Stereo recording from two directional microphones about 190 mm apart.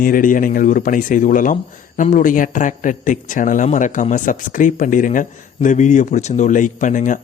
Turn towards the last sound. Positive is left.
turn(degrees=40)  # may be behind; listen again after turning